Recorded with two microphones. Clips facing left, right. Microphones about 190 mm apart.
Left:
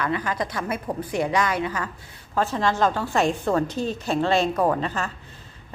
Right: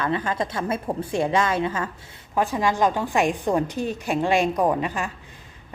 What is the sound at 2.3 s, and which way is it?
A woman's voice, 15° right (ahead or behind).